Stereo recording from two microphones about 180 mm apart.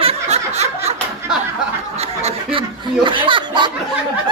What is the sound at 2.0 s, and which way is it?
Snicker, 35° right (ahead or behind).